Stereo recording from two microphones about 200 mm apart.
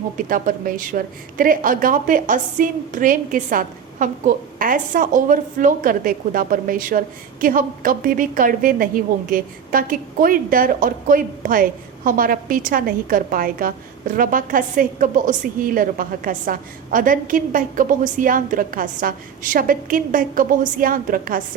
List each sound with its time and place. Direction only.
0.2 s a woman's voice: 45° right (ahead or behind)